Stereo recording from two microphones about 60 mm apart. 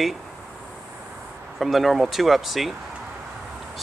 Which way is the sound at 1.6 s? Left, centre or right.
Centre.